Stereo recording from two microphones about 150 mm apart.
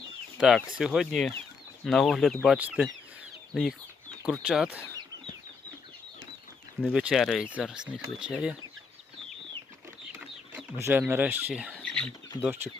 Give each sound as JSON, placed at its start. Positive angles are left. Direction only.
{"t": 0.3, "sound": "speech", "side_deg": -5}
{"t": 2.6, "sound": "speech", "side_deg": -10}
{"t": 3.5, "sound": "chicken", "side_deg": 0}
{"t": 4.3, "sound": "speech", "side_deg": -5}
{"t": 6.9, "sound": "speech", "side_deg": 0}
{"t": 10.5, "sound": "speech", "side_deg": -15}
{"t": 11.8, "sound": "chicken", "side_deg": 5}
{"t": 12.4, "sound": "speech", "side_deg": -15}